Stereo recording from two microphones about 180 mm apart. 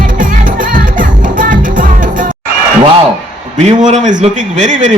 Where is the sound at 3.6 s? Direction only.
40° right (ahead or behind).